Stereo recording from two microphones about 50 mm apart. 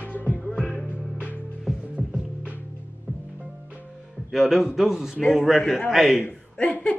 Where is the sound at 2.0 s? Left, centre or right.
Right.